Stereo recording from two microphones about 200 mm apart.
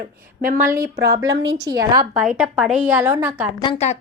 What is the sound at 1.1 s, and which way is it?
Speech, 15° right (ahead or behind).